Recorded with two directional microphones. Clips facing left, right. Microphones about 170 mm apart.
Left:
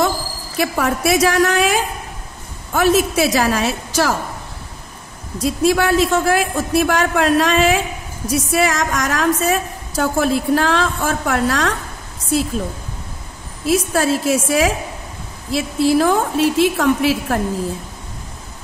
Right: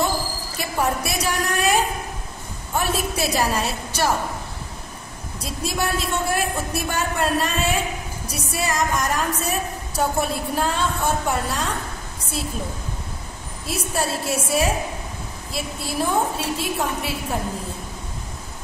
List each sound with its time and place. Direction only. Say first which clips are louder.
0.6 s a woman's voice: left 5 dB; 90° left
5.4 s a woman's voice: left 10 dB; 90° left
13.7 s a woman's voice: left 9 dB; 90° left